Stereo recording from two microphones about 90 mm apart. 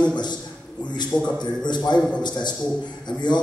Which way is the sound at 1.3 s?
55° left (ahead or behind).